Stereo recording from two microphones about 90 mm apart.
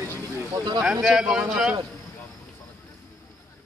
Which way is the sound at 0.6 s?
45° right (ahead or behind).